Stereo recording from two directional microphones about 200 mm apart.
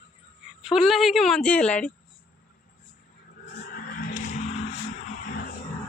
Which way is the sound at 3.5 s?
45° left (ahead or behind).